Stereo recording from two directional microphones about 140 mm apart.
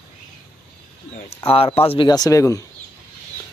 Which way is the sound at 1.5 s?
45° left (ahead or behind).